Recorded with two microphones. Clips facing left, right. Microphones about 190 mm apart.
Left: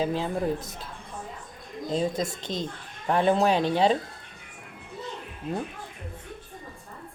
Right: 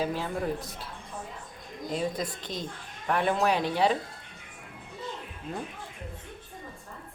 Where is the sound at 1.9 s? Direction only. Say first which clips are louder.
Left 4 dB; 25° left (ahead or behind).